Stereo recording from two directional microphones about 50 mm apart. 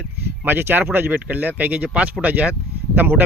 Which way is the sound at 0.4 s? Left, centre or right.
Right.